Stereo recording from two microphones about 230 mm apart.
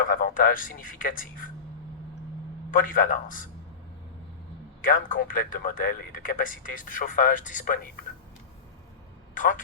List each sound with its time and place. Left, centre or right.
0.0 s speech: left
2.6 s speech: left
4.8 s speech: left
9.3 s a sound: left